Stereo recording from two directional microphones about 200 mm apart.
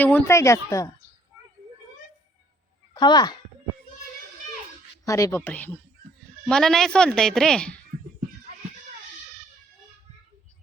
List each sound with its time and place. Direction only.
0.0 s speech: 10° left (ahead or behind)
2.9 s speech: 20° left (ahead or behind)
5.0 s a woman's voice: 15° left (ahead or behind)